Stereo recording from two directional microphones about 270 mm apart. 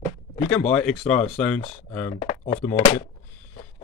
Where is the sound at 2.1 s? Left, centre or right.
Left.